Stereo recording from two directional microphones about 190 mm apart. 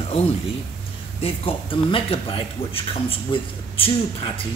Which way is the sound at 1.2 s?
30° left (ahead or behind).